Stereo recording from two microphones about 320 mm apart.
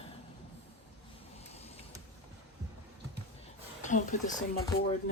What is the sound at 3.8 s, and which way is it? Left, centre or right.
Speech, left.